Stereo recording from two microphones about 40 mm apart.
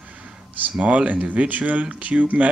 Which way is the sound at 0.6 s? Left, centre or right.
Right.